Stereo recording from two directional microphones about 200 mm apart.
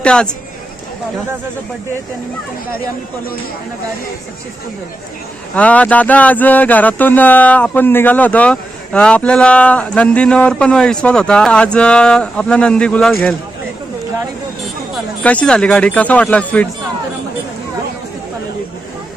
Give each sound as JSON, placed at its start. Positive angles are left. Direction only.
{"t": 0.0, "sound": "speech", "side_deg": 5}
{"t": 5.5, "sound": "speech", "side_deg": 5}
{"t": 15.2, "sound": "speech", "side_deg": 5}